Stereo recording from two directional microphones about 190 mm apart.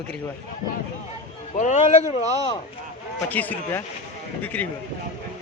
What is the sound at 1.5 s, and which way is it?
Speech, 40° left (ahead or behind).